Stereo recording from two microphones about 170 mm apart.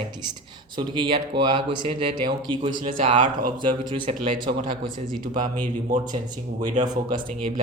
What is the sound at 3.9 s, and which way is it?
Speech, 30° right (ahead or behind).